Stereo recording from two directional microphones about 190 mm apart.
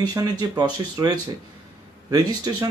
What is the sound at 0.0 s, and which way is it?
Speech, 20° right (ahead or behind).